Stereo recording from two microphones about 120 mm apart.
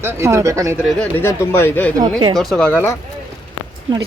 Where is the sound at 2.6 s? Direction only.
20° left (ahead or behind).